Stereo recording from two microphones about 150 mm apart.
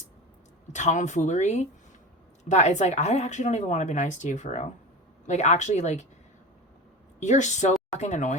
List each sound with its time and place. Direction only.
0.7 s speech: 55° left (ahead or behind)
7.2 s speech: 50° left (ahead or behind)